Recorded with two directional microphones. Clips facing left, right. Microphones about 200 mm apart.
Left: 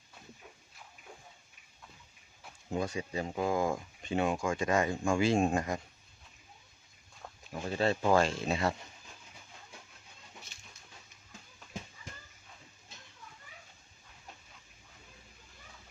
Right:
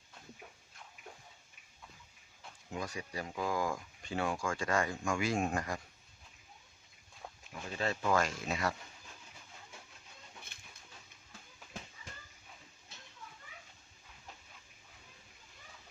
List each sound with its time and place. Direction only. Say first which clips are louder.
2.6 s speech: left 7 dB; 30° left (ahead or behind)
7.5 s speech: left 7 dB; 30° left (ahead or behind)
10.5 s dog: left 1 dB; 55° right (ahead or behind)